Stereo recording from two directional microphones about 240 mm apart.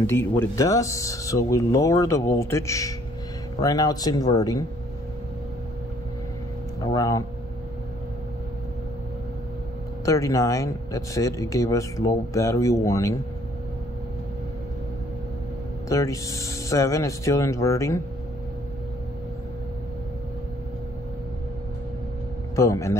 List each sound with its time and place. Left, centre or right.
0.0 s speech: centre
6.8 s speech: centre
10.0 s speech: centre
15.9 s speech: centre
22.6 s speech: centre